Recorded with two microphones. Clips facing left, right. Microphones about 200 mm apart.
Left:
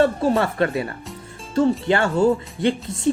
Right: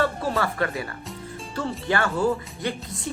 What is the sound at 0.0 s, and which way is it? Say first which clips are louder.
Speech: left 6 dB; 25° left (ahead or behind).